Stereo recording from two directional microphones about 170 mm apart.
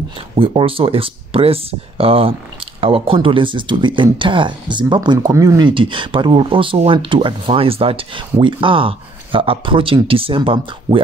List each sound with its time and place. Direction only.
0.4 s speech: 30° right (ahead or behind)